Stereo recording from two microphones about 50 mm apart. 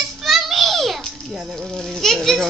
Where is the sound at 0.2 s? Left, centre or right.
Centre.